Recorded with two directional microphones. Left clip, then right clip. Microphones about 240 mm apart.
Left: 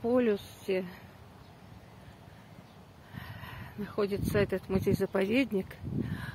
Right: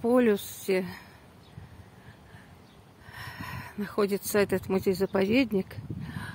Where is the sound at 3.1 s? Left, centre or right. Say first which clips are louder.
Right 6 dB; right.